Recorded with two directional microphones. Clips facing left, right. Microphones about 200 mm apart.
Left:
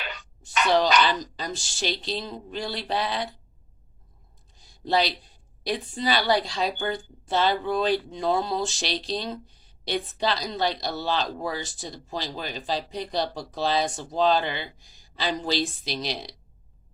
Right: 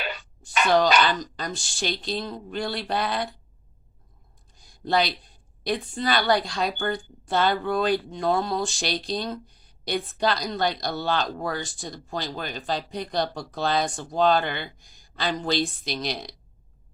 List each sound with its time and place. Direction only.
0.6 s a woman's voice: centre (ahead or behind)
5.6 s speech: 5° left (ahead or behind)